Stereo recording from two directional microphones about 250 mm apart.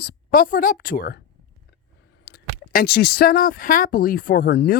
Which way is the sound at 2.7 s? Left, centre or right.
Left.